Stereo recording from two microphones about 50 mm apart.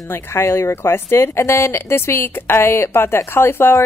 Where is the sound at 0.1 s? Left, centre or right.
Left.